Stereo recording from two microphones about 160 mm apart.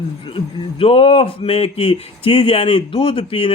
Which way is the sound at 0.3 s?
35° left (ahead or behind).